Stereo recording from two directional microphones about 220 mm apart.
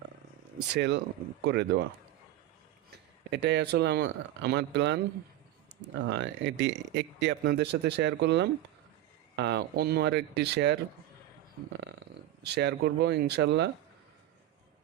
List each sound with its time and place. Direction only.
0.7 s speech: 50° right (ahead or behind)
3.2 s speech: 50° right (ahead or behind)
6.1 s speech: 50° right (ahead or behind)